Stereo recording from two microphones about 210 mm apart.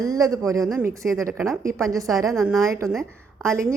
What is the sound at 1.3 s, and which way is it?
Speech, centre (ahead or behind).